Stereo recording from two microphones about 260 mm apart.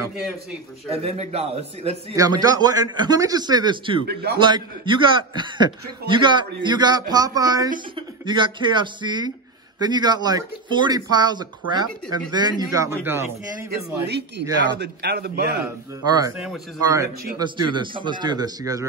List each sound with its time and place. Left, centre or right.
0.8 s a man's voice: right
4.1 s a man's voice: right
4.4 s a man's voice: centre
13.7 s a man's voice: right
15.6 s a man's voice: centre